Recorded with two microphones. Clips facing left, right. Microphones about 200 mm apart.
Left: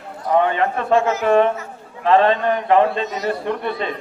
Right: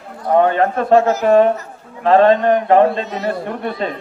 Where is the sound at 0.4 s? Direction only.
45° right (ahead or behind).